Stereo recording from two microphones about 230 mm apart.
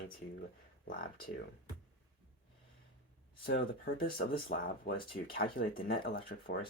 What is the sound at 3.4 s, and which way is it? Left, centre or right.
Speech, left.